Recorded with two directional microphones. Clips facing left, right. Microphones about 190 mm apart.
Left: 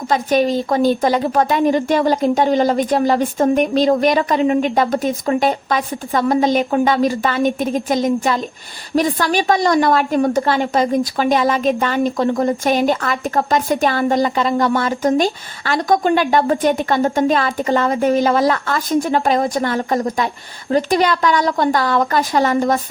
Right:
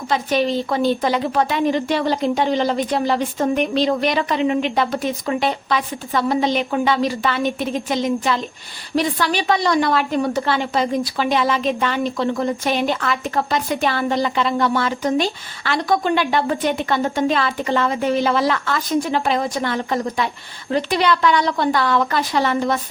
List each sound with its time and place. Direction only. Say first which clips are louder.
0.1 s a woman's voice: left 3 dB; 45° left (ahead or behind)